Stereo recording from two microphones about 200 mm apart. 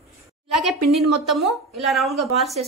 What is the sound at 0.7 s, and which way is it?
Speech, centre (ahead or behind).